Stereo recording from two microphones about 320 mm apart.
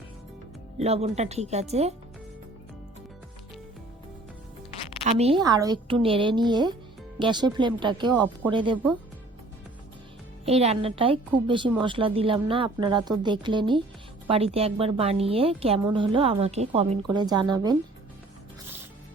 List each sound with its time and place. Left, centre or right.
0.8 s speech: centre
5.0 s a woman's voice: centre
10.4 s a woman's voice: centre